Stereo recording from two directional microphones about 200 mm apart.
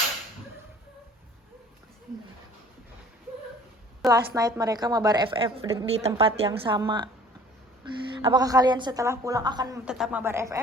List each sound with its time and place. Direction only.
4.1 s a woman's voice: 15° right (ahead or behind)
8.1 s a woman's voice: 25° right (ahead or behind)
9.8 s speech: 5° right (ahead or behind)